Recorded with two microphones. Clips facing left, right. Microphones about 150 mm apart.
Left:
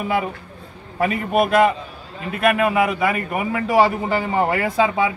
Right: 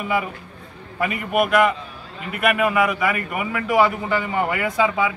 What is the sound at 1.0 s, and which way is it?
A man's voice, 35° left (ahead or behind).